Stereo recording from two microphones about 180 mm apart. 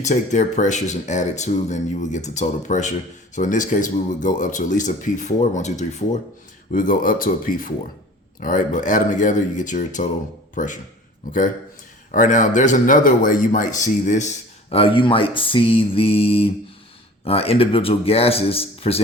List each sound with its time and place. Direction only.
0.0 s a man's voice: 40° left (ahead or behind)
6.7 s a man's voice: 50° left (ahead or behind); by 19.0 s 35° left (ahead or behind)